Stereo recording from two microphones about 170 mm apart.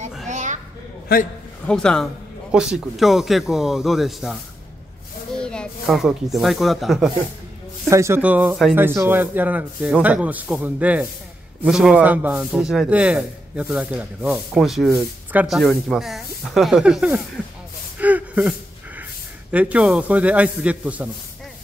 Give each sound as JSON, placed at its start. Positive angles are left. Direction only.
{"t": 0.3, "sound": "a sound", "side_deg": -45}
{"t": 1.1, "sound": "a man's voice", "side_deg": 60}
{"t": 1.7, "sound": "a man's voice", "side_deg": 5}
{"t": 5.4, "sound": "snake", "side_deg": 5}
{"t": 6.3, "sound": "a man's voice", "side_deg": 0}
{"t": 7.9, "sound": "a man's voice", "side_deg": -15}
{"t": 17.9, "sound": "gasp", "side_deg": -10}
{"t": 19.5, "sound": "speech", "side_deg": -10}